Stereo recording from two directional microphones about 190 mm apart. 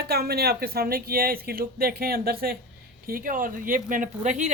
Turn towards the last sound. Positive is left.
turn(degrees=-40)  # may be behind; listen again after turning